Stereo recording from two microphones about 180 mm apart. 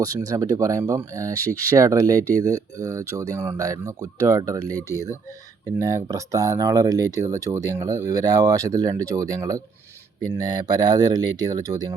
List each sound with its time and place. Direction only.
0.0 s speech: 20° right (ahead or behind)
5.8 s speech: 20° right (ahead or behind)